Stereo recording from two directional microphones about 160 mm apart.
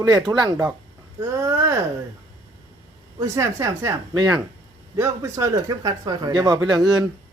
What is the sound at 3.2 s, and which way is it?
Speech, 20° right (ahead or behind).